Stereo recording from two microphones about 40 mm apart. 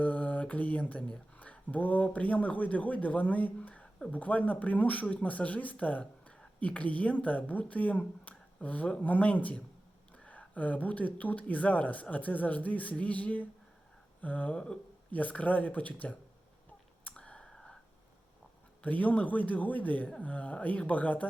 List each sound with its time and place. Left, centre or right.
0.0 s a sound: left
0.4 s a man's voice: left
14.5 s speech: left
15.1 s a man's voice: left
17.0 s clicking: left
17.5 s a sound: centre
18.8 s a man's voice: left